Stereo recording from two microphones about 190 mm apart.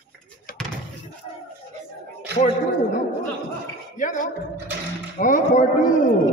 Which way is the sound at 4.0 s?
40° left (ahead or behind).